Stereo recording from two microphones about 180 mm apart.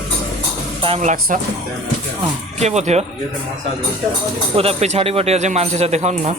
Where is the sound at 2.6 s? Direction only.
40° right (ahead or behind).